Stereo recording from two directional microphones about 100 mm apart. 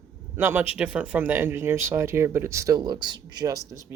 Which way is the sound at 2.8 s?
45° right (ahead or behind).